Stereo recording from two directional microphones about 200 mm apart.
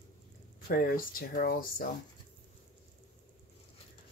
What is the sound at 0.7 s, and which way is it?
Speech, 45° left (ahead or behind).